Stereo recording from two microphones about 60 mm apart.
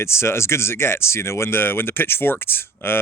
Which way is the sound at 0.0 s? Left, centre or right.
Left.